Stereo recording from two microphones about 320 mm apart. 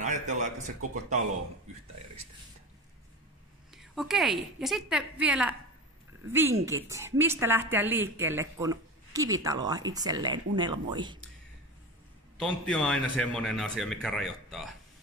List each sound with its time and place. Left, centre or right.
0.0 s speech: right
3.7 s a man's voice: centre
12.4 s a man's voice: centre